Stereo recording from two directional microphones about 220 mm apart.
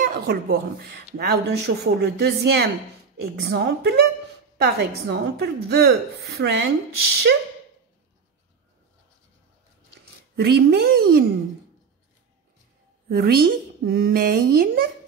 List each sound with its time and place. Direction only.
0.0 s speech: 40° right (ahead or behind)
10.3 s speech: 45° right (ahead or behind)
13.1 s speech: 45° right (ahead or behind)